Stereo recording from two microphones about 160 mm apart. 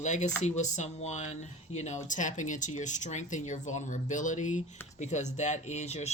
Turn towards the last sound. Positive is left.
turn(degrees=45)  # may be behind; listen again after turning